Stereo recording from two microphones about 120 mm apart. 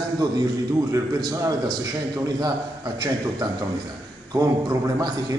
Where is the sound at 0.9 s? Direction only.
30° right (ahead or behind).